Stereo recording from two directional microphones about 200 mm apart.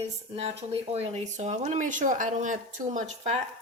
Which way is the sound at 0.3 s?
30° right (ahead or behind).